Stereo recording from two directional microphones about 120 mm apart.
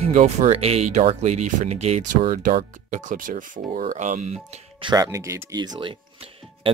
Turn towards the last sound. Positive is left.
turn(degrees=-50)  # may be behind; listen again after turning